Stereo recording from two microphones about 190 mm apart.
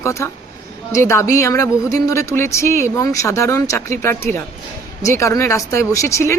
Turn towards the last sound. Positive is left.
turn(degrees=15)  # may be behind; listen again after turning